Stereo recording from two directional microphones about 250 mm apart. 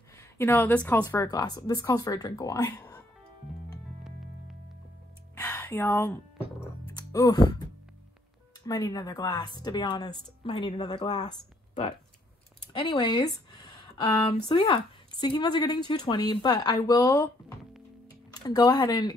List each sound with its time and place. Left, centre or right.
0.2 s a woman's voice: centre
5.3 s music: centre
7.0 s speech: centre
8.6 s a woman's voice: centre
12.7 s a sound: centre
14.5 s a woman's voice: centre